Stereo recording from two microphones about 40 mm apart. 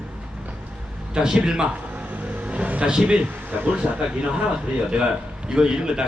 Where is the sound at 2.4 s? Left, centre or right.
Right.